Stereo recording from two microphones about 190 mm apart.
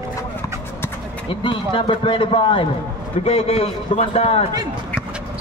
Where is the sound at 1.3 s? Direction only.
25° left (ahead or behind).